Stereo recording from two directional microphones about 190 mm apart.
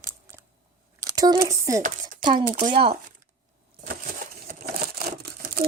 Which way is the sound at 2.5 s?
40° right (ahead or behind).